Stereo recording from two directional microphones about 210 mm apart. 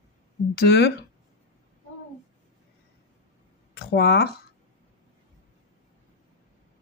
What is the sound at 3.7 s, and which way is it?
Speech, 50° left (ahead or behind).